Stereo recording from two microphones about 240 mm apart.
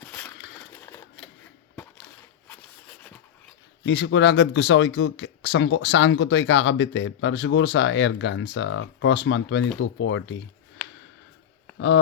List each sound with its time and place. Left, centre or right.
0.7 s typewriter: centre
2.6 s a sound: centre
3.8 s speech: left